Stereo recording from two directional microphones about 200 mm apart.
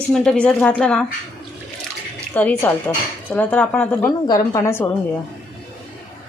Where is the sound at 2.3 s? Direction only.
10° left (ahead or behind).